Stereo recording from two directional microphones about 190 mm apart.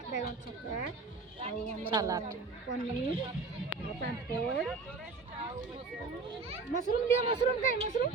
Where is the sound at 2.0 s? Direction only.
15° right (ahead or behind).